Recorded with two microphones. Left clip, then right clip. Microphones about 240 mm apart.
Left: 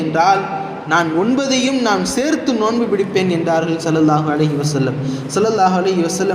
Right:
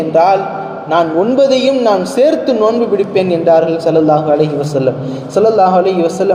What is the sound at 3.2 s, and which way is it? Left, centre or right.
A man's voice, left.